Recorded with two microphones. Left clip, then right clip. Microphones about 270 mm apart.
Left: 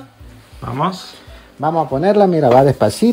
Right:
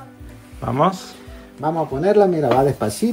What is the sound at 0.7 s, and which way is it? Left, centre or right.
Speech, centre.